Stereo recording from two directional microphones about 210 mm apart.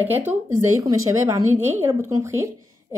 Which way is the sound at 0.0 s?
10° right (ahead or behind).